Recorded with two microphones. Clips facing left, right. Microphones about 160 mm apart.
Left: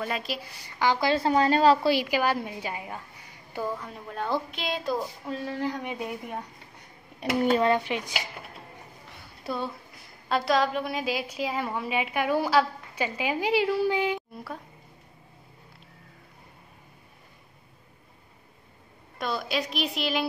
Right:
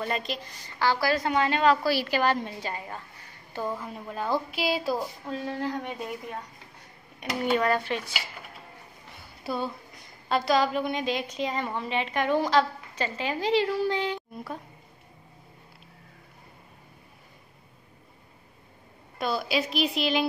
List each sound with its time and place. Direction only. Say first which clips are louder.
0.0 s a woman's voice: right 1 dB; 5° left (ahead or behind)
3.6 s a woman's voice: right 1 dB; centre (ahead or behind)
5.6 s a woman's voice: left 1 dB; 10° left (ahead or behind)
7.2 s speech: left 3 dB; 35° left (ahead or behind)
7.7 s a woman's voice: left 1 dB; 15° left (ahead or behind)
9.4 s a woman's voice: right 1 dB; centre (ahead or behind)
19.1 s a woman's voice: right 2 dB; centre (ahead or behind)